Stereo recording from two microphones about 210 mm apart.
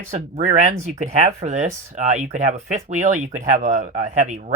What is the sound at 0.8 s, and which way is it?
Speech, 35° right (ahead or behind).